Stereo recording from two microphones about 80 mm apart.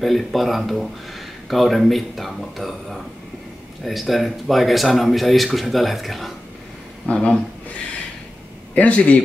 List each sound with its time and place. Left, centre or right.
0.0 s speech: centre
7.1 s a man's voice: centre
8.7 s a man's voice: centre